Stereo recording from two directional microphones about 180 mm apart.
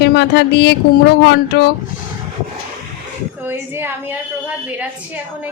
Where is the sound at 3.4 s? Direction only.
10° right (ahead or behind).